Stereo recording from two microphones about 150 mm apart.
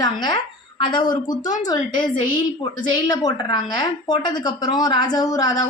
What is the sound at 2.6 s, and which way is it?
A woman's voice, 25° left (ahead or behind).